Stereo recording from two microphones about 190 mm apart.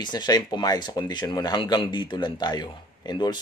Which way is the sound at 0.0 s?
20° left (ahead or behind).